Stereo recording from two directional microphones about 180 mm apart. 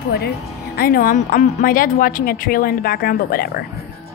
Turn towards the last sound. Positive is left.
turn(degrees=55)  # may be behind; listen again after turning